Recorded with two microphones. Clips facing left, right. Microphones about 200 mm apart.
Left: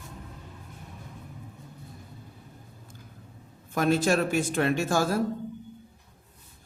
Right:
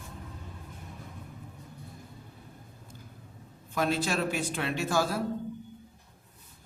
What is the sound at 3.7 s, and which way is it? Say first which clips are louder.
Speech: left 5 dB; 50° left (ahead or behind).